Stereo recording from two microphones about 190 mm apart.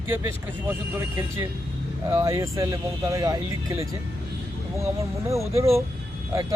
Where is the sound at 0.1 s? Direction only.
15° right (ahead or behind).